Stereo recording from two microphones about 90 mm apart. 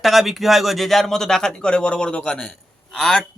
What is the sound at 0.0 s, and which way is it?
A man's voice, centre (ahead or behind).